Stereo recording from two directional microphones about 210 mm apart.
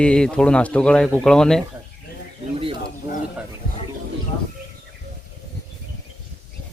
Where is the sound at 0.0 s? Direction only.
5° left (ahead or behind).